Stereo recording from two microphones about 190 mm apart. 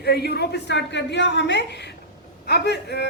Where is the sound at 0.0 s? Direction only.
60° left (ahead or behind).